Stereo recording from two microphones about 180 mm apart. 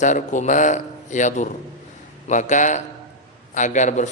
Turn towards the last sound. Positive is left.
turn(degrees=40)  # may be behind; listen again after turning